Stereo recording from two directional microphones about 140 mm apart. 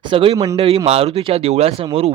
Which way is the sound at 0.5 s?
40° right (ahead or behind).